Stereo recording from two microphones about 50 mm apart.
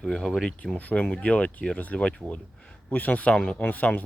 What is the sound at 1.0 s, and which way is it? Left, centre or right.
Speech, left.